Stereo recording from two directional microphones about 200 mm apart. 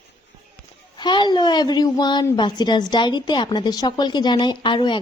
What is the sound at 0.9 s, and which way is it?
A woman's voice, 20° left (ahead or behind).